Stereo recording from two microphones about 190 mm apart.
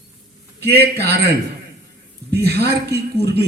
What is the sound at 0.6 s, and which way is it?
Speech, 60° right (ahead or behind).